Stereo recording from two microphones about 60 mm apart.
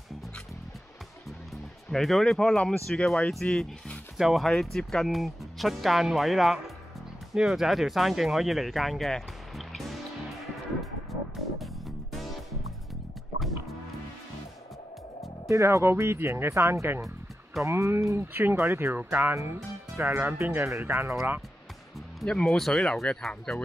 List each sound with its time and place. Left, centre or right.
1.5 s speech: centre
10.8 s music: centre
15.4 s speech: right
18.2 s speech: right
19.3 s speech: right
22.2 s speech: centre